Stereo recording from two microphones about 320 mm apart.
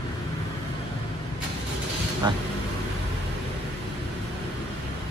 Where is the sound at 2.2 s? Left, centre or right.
Centre.